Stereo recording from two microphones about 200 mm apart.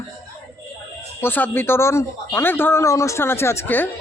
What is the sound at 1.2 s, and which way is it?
Speech, 10° left (ahead or behind).